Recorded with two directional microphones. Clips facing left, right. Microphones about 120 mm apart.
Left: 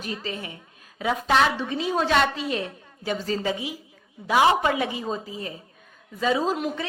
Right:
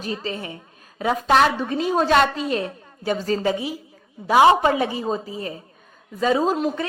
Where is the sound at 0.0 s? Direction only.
35° right (ahead or behind).